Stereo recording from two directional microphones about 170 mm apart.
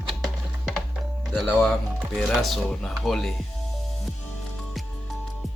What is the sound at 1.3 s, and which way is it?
Speech, centre (ahead or behind).